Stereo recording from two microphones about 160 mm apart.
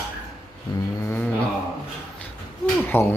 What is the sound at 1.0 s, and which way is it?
Mantra, 10° left (ahead or behind).